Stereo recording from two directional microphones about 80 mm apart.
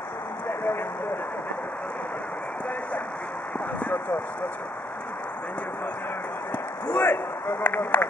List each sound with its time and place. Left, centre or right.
6.9 s speech: left